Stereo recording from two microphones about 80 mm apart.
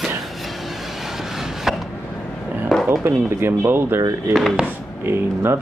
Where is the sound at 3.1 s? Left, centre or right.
Right.